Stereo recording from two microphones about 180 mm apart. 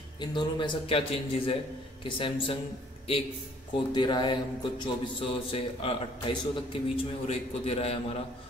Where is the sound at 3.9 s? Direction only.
25° left (ahead or behind).